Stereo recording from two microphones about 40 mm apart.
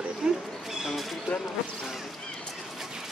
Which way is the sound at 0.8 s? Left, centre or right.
Centre.